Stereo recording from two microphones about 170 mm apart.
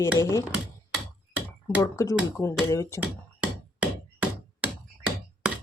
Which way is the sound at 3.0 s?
10° right (ahead or behind).